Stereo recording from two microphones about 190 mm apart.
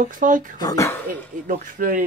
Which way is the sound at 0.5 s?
20° left (ahead or behind).